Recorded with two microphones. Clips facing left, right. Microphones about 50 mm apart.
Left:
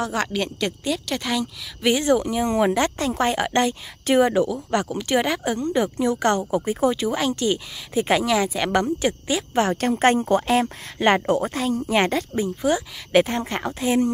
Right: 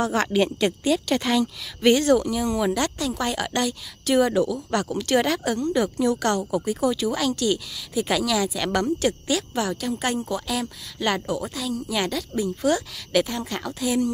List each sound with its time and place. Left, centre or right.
0.0 s a woman's voice: centre
2.2 s a woman's voice: left
9.5 s a woman's voice: left
12.6 s a woman's voice: left
13.2 s speech: left